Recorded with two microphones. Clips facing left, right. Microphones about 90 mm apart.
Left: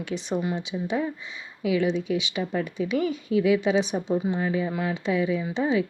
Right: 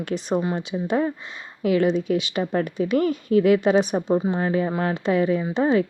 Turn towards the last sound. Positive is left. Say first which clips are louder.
# right 4 dB
turn(degrees=-50)  # may be behind; listen again after turning